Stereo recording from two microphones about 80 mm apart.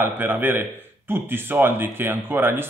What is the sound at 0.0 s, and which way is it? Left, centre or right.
A man's voice, right.